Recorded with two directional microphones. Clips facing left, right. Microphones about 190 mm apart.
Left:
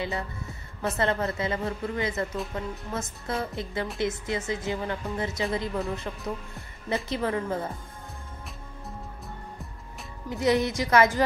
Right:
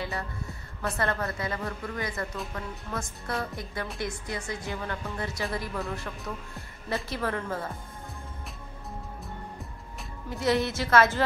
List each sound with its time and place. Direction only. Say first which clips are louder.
0.9 s speech: left 4 dB; 20° left (ahead or behind)
10.3 s speech: left 2 dB; 15° left (ahead or behind)